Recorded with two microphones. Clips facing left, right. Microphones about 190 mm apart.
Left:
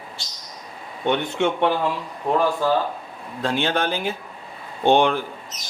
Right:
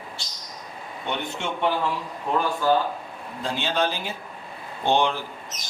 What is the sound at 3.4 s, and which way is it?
Speech, 60° left (ahead or behind).